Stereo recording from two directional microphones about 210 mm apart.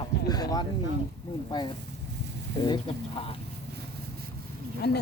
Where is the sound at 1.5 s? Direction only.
20° left (ahead or behind).